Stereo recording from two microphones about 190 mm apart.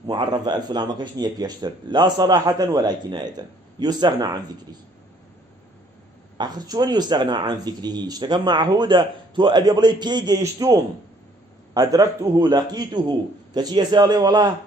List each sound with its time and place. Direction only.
0.0 s speech: 20° right (ahead or behind)
6.3 s speech: 20° right (ahead or behind)